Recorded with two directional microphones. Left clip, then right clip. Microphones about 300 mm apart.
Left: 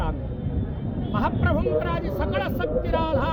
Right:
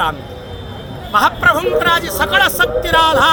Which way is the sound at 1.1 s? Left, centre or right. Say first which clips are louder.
Right 14 dB; centre.